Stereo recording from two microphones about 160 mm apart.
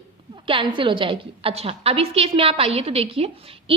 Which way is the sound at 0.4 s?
30° right (ahead or behind).